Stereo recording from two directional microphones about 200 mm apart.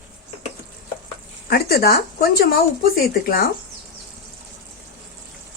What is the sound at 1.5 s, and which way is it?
Speech, 50° left (ahead or behind).